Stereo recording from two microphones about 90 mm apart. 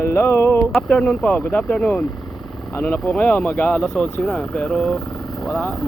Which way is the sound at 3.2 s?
15° left (ahead or behind).